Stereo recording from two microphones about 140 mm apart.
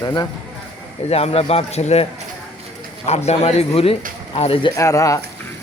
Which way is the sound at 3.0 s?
50° left (ahead or behind).